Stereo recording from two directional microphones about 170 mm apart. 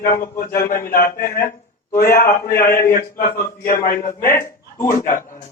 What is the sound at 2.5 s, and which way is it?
Speech, 15° left (ahead or behind).